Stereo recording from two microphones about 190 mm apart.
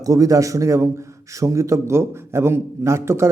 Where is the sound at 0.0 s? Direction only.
20° right (ahead or behind).